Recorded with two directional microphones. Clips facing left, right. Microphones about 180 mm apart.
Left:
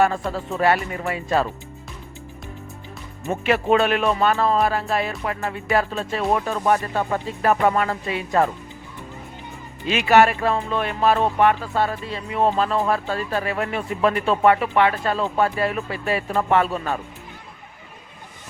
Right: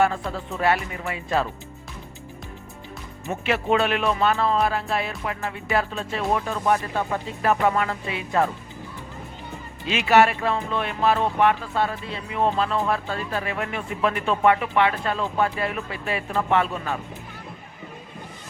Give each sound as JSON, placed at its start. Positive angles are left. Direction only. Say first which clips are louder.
{"t": 0.0, "sound": "music", "louder": "left 2 dB", "side_deg": 45}
{"t": 3.4, "sound": "music", "louder": "left 3 dB", "side_deg": 45}
{"t": 9.9, "sound": "music", "louder": "left 2 dB", "side_deg": 50}